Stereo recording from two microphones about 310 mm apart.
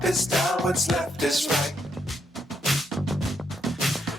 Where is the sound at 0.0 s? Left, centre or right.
Centre.